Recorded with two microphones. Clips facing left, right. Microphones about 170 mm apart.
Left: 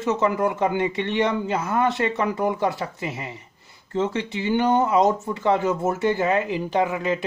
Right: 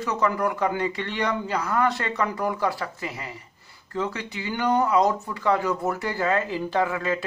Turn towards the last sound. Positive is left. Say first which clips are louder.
# left 2 dB
turn(degrees=20)  # may be behind; listen again after turning